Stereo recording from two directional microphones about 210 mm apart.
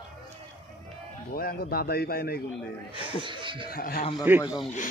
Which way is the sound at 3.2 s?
25° right (ahead or behind).